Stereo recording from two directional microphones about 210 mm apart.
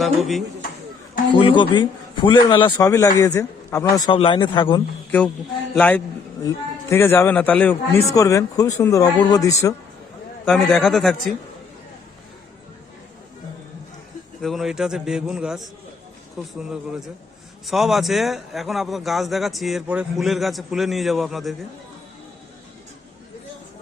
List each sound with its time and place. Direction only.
0.0 s a man's voice: centre (ahead or behind)
1.4 s a man's voice: 25° left (ahead or behind)
5.7 s a man's voice: 5° left (ahead or behind)
10.4 s a man's voice: centre (ahead or behind)
14.4 s a man's voice: centre (ahead or behind)